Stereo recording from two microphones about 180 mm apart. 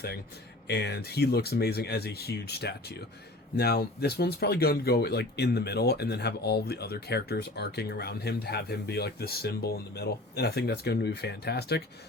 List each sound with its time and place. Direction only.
0.7 s speech: 65° left (ahead or behind)